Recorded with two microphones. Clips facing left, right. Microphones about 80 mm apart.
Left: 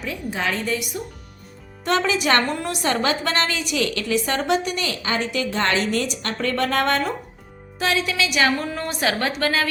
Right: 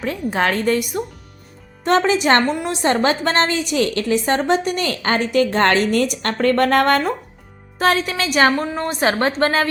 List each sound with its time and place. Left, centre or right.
0.0 s a woman's voice: right
1.8 s a woman's voice: right